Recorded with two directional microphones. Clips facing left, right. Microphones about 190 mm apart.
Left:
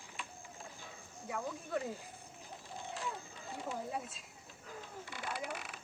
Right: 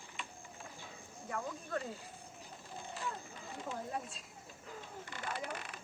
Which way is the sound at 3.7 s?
5° left (ahead or behind).